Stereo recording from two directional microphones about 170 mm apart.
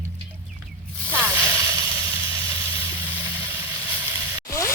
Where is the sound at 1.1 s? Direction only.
10° right (ahead or behind).